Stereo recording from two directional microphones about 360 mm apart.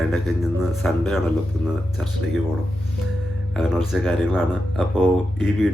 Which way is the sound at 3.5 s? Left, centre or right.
Centre.